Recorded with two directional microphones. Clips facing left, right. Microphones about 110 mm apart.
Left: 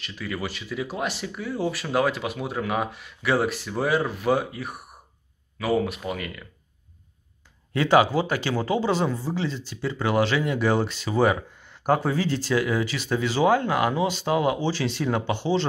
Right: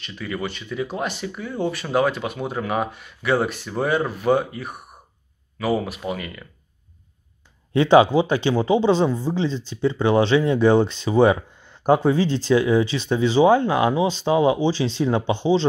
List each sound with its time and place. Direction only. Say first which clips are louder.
0.0 s speech: right 3 dB; centre (ahead or behind)
7.7 s speech: right 5 dB; 25° right (ahead or behind)